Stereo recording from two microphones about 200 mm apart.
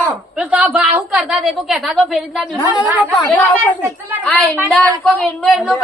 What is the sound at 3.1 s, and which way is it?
Speech, 10° left (ahead or behind).